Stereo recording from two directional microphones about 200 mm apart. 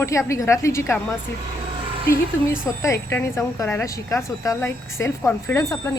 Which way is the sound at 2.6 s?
15° left (ahead or behind).